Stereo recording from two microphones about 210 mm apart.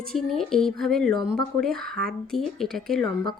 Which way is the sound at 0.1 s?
Centre (ahead or behind).